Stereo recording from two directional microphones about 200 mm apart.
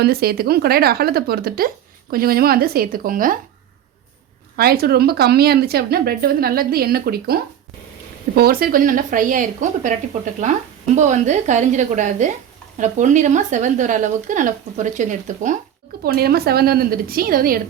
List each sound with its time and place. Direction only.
0.0 s speech: 50° right (ahead or behind)
4.5 s speech: 50° right (ahead or behind)
8.4 s speech: 50° right (ahead or behind)
10.9 s speech: 35° right (ahead or behind)
16.0 s speech: 50° right (ahead or behind)